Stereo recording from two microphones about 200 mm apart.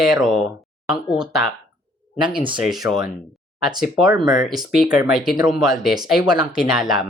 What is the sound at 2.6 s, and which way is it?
Speech, centre (ahead or behind).